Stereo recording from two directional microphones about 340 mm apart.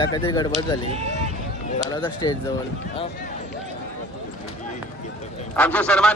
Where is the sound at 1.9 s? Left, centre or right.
Centre.